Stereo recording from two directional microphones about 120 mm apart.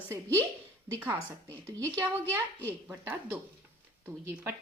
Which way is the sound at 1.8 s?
15° left (ahead or behind).